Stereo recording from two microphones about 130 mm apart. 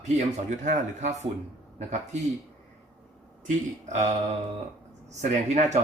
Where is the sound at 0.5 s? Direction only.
80° right.